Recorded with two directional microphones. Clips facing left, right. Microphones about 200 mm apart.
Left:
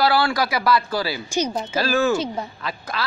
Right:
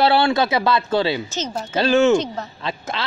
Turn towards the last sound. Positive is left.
turn(degrees=-25)  # may be behind; listen again after turning